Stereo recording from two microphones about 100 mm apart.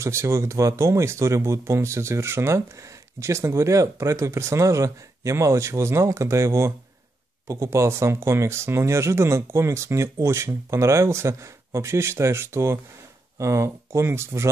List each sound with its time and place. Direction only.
0.0 s speech: 30° right (ahead or behind)